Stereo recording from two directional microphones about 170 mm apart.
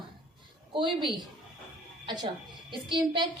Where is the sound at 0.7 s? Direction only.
30° right (ahead or behind).